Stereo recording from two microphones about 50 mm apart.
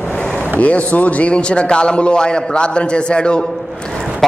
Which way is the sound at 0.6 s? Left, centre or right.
Left.